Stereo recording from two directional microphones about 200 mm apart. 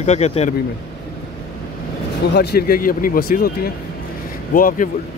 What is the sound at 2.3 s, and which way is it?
Speech, 50° left (ahead or behind).